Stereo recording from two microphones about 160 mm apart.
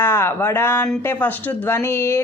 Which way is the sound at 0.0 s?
15° left (ahead or behind).